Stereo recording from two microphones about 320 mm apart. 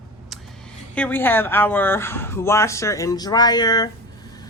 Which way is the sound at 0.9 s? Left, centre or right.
Centre.